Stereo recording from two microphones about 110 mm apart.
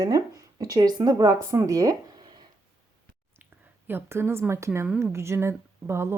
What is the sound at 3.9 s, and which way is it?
A woman's voice, 20° right (ahead or behind).